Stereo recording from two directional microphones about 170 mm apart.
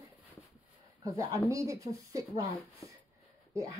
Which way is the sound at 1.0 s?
20° right (ahead or behind).